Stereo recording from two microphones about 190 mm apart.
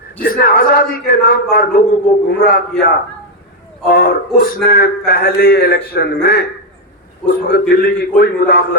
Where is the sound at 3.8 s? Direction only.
50° left (ahead or behind).